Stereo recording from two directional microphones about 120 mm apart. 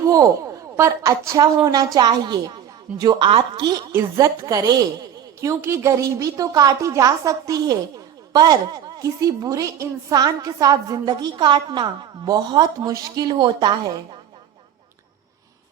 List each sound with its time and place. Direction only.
0.0 s a sound: 30° right (ahead or behind)
0.8 s a woman's voice: 25° right (ahead or behind); by 3.7 s 45° right (ahead or behind)
3.9 s a woman's voice: 25° right (ahead or behind)